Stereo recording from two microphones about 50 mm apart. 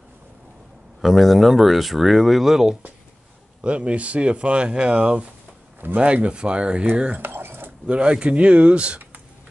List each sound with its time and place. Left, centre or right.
1.0 s speech: centre
3.6 s speech: right
7.2 s cutlery: right
7.8 s speech: right